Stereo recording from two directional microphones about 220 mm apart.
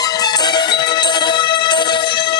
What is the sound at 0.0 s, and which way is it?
Music, 20° left (ahead or behind).